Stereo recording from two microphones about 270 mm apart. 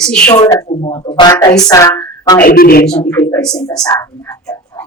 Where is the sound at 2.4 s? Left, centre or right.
Left.